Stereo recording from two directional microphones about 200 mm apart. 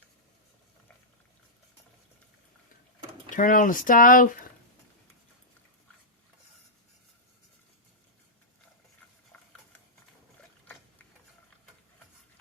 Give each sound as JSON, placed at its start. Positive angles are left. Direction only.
{"t": 3.2, "sound": "speech", "side_deg": 40}